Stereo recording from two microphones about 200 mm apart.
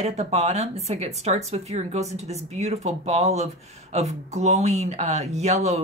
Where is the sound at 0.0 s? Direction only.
35° right (ahead or behind).